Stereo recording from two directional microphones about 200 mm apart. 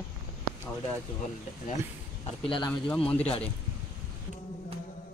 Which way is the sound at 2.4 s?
25° left (ahead or behind).